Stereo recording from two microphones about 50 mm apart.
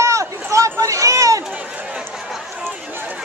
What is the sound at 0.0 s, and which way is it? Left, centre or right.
Run, right.